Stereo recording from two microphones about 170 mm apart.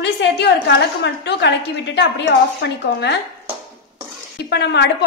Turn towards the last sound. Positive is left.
turn(degrees=85)